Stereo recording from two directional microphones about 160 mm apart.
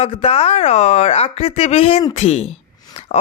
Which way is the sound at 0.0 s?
35° left (ahead or behind).